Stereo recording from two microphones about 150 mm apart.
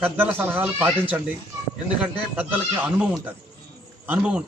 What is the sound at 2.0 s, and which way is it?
Speech, 10° right (ahead or behind).